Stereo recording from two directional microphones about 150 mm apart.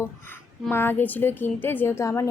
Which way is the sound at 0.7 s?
15° left (ahead or behind).